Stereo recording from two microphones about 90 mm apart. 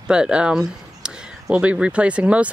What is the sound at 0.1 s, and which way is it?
Speech, 10° right (ahead or behind).